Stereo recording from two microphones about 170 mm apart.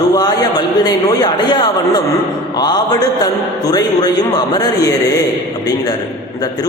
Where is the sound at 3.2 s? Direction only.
20° left (ahead or behind).